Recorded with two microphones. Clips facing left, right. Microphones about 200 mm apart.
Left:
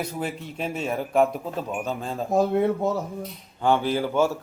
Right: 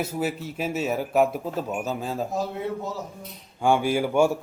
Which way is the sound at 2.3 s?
55° left (ahead or behind).